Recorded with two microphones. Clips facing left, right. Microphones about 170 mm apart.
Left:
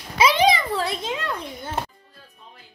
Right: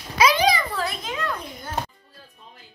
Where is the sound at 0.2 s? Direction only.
25° left (ahead or behind).